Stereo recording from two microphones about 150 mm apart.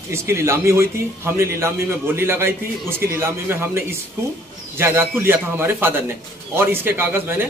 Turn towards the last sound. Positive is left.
turn(degrees=-15)  # may be behind; listen again after turning